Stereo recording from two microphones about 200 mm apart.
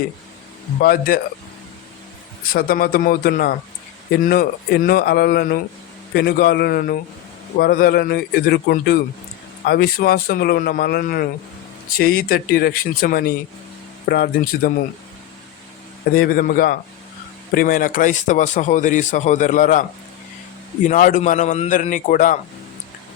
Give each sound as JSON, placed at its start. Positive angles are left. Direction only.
{"t": 0.8, "sound": "speech", "side_deg": 50}
{"t": 2.5, "sound": "speech", "side_deg": 45}
{"t": 16.1, "sound": "a man's voice", "side_deg": 45}